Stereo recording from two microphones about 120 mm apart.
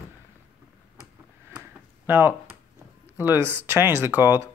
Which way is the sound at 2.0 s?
20° right (ahead or behind).